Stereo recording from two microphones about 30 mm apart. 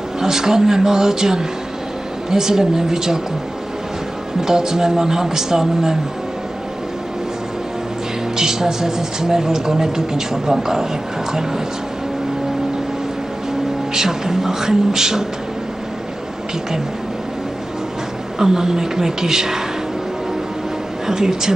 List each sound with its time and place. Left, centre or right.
0.2 s speech: centre
4.4 s speech: centre
8.4 s speech: centre
13.9 s speech: centre
18.4 s speech: centre
21.1 s speech: centre